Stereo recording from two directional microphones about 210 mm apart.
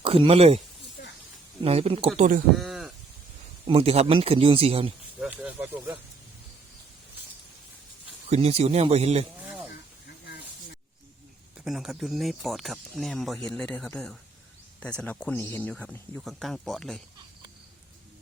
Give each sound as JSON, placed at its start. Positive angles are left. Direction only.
{"t": 0.0, "sound": "speech", "side_deg": -25}
{"t": 1.6, "sound": "speech", "side_deg": -30}
{"t": 2.1, "sound": "speech", "side_deg": -35}
{"t": 2.6, "sound": "a sound", "side_deg": 0}
{"t": 3.7, "sound": "speech", "side_deg": -30}
{"t": 5.2, "sound": "speech", "side_deg": -5}
{"t": 8.3, "sound": "speech", "side_deg": -30}
{"t": 9.4, "sound": "snake", "side_deg": -10}
{"t": 11.5, "sound": "speech", "side_deg": 0}